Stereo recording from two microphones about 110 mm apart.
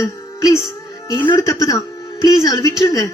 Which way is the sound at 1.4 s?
30° left (ahead or behind).